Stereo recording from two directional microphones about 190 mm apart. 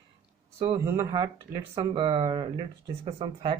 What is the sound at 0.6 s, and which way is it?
Speech, 20° right (ahead or behind).